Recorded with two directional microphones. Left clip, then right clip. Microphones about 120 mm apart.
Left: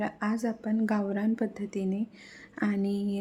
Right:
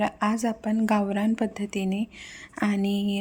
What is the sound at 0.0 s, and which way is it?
Speech, 25° right (ahead or behind).